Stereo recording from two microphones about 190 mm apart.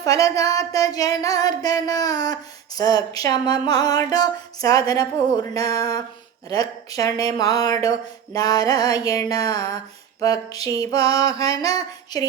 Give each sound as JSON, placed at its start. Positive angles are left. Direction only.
{"t": 0.0, "sound": "speech", "side_deg": 20}